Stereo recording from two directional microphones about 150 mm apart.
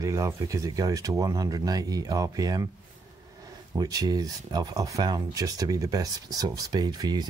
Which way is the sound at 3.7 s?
25° right (ahead or behind).